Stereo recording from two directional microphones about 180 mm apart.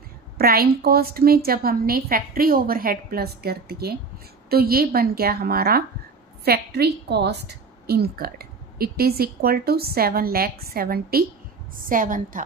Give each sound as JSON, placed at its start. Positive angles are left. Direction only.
{"t": 0.4, "sound": "a woman's voice", "side_deg": -60}